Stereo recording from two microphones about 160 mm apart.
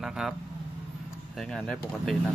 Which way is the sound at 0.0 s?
5° right (ahead or behind).